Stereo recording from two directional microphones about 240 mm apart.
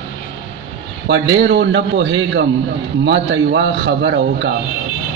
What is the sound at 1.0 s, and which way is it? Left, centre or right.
A man's voice, right.